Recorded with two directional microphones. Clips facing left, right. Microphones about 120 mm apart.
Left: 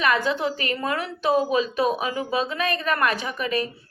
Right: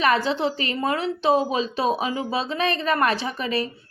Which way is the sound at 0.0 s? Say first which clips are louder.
Right 2 dB; 35° right (ahead or behind).